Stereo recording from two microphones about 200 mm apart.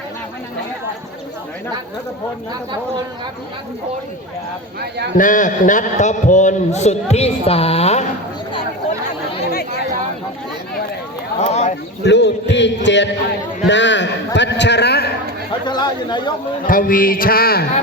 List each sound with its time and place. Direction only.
4.8 s a man's voice: 55° right (ahead or behind)
5.1 s a man's voice: 40° left (ahead or behind)
9.5 s chatter: 50° left (ahead or behind)
11.3 s a man's voice: 35° left (ahead or behind)
12.0 s a man's voice: 60° left (ahead or behind)
15.6 s speech: 20° left (ahead or behind)
16.6 s a sound: 45° left (ahead or behind)